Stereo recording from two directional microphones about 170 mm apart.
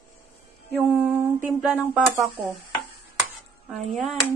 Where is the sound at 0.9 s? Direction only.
10° right (ahead or behind).